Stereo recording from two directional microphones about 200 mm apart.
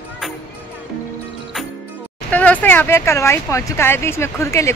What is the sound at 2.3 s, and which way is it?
A woman's voice, 5° left (ahead or behind).